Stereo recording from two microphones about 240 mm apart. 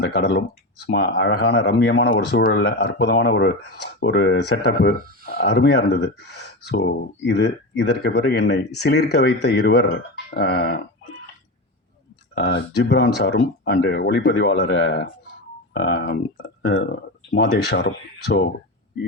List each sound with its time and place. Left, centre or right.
0.0 s speech: left
12.3 s speech: left